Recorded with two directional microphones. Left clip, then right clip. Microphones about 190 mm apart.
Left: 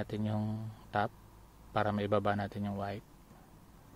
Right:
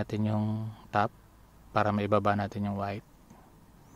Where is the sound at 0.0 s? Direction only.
25° right (ahead or behind).